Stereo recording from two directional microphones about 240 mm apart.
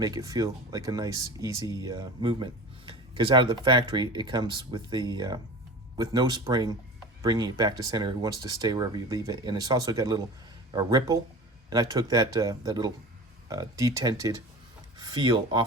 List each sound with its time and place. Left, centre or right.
0.0 s speech: centre